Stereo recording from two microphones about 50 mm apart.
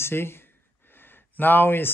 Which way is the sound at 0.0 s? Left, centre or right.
Left.